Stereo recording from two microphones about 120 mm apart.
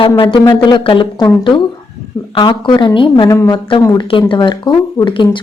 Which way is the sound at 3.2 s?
25° left (ahead or behind).